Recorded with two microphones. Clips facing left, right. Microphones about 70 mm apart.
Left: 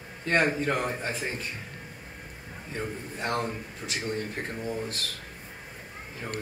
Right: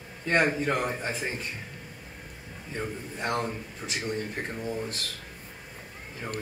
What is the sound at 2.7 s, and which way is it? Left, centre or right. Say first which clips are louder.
A man's voice: even; centre.